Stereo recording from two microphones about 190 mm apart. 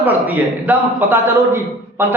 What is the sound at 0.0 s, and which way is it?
A man's voice, 10° right (ahead or behind).